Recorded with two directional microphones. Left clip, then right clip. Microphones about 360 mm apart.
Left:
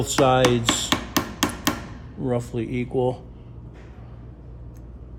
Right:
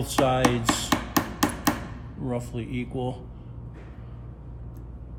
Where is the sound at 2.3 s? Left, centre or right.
Left.